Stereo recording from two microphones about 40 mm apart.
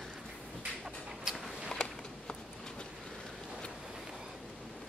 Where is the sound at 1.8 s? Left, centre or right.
Left.